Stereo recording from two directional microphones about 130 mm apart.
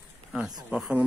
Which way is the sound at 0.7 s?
10° right (ahead or behind).